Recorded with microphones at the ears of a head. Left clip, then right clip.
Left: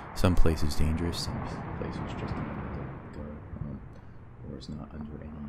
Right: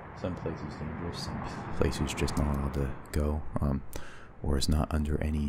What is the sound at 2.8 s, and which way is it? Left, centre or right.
Speech, right.